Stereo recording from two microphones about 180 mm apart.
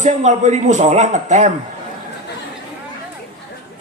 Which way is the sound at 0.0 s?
40° right (ahead or behind).